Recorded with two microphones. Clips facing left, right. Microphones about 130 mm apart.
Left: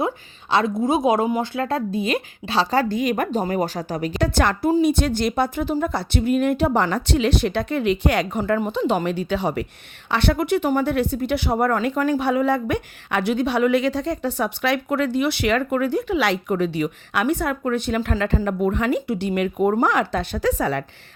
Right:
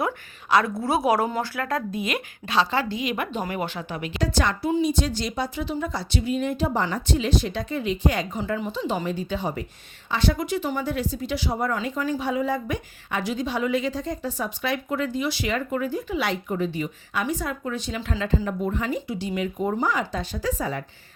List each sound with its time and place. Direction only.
0.5 s speech: 20° left (ahead or behind); by 4.2 s 40° left (ahead or behind)
4.2 s speech: 60° left (ahead or behind); by 9.6 s 75° left (ahead or behind)
10.1 s speech: 65° left (ahead or behind)